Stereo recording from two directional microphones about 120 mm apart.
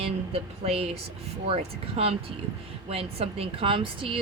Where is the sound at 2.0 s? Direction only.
55° right (ahead or behind).